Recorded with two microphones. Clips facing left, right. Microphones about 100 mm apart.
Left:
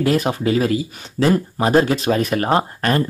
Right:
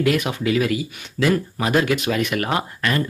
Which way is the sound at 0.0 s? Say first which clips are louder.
Left 2 dB; 35° left (ahead or behind).